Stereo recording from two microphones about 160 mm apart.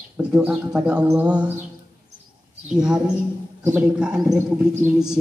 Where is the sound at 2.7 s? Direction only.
5° right (ahead or behind).